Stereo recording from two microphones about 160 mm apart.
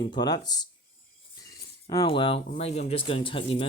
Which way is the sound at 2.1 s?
35° left (ahead or behind).